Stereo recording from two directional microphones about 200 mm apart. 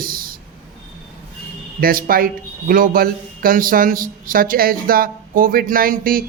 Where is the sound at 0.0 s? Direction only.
45° right (ahead or behind).